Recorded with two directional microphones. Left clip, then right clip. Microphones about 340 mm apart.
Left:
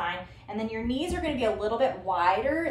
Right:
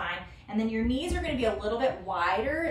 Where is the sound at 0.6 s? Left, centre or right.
Centre.